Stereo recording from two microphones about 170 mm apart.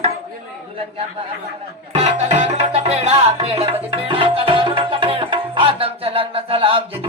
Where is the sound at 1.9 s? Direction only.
40° right (ahead or behind).